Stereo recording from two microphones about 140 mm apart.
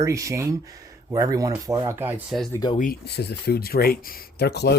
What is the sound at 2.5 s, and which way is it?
Speech, 25° left (ahead or behind).